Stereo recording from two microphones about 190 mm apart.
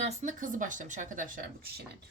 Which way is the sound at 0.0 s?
40° right (ahead or behind).